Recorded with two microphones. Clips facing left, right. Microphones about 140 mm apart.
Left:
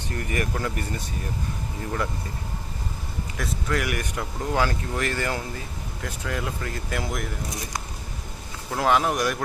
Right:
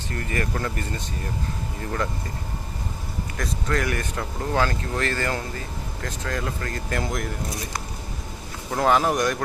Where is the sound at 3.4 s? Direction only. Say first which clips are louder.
Right 1 dB; 10° left (ahead or behind).